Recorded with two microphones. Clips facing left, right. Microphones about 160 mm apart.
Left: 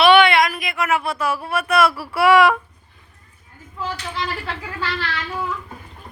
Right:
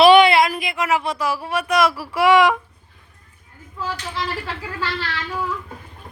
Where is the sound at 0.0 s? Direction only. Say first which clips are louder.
Right 2 dB; 35° right (ahead or behind); by 2.6 s 15° right (ahead or behind).